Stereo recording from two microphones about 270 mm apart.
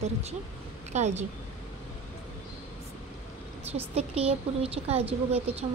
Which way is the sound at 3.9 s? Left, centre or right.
Right.